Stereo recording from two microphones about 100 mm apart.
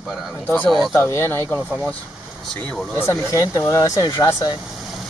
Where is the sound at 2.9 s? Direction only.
30° left (ahead or behind).